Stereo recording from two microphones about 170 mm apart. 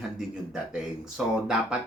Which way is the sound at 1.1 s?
5° right (ahead or behind).